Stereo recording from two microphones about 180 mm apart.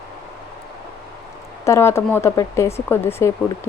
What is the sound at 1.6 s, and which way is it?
Speech, 15° left (ahead or behind).